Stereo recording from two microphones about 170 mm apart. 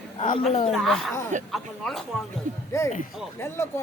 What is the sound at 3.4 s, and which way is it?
Speech, 15° left (ahead or behind).